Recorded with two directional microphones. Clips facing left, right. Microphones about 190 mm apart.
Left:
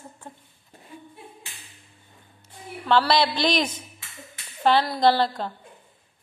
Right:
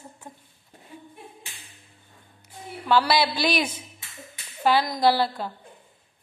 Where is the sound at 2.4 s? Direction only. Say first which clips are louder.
Even; 10° right (ahead or behind).